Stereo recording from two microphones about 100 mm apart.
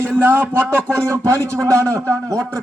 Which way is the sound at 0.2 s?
20° right (ahead or behind).